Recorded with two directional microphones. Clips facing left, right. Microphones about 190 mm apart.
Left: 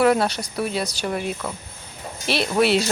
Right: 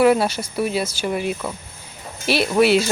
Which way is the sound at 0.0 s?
5° right (ahead or behind).